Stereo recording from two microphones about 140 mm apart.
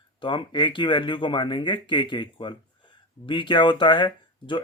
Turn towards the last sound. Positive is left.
turn(degrees=35)  # may be behind; listen again after turning